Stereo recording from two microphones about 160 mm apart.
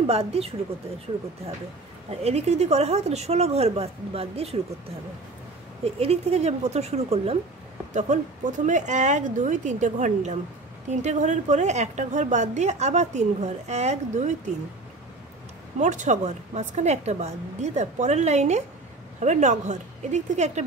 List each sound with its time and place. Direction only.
0.0 s speech: 40° right (ahead or behind)
2.0 s speech: 40° right (ahead or behind)
5.9 s speech: 40° right (ahead or behind)
7.9 s a woman's voice: 50° right (ahead or behind)
15.8 s a woman's voice: 50° right (ahead or behind)